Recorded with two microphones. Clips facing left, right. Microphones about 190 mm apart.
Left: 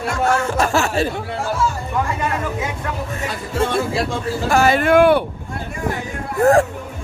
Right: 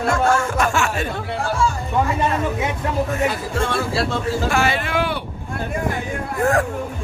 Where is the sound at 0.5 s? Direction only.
35° left (ahead or behind).